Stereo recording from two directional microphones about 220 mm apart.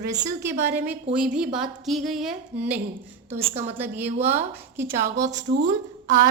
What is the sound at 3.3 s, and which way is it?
Speech, 25° right (ahead or behind).